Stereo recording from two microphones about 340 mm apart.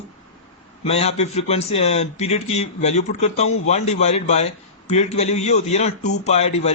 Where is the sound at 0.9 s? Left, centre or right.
Centre.